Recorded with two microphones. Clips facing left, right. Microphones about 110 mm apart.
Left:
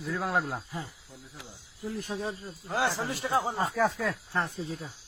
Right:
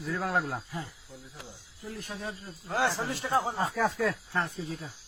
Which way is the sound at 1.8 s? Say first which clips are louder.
Left 5 dB; 25° left (ahead or behind).